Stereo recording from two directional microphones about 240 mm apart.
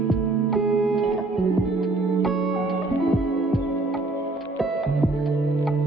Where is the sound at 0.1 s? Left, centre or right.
Centre.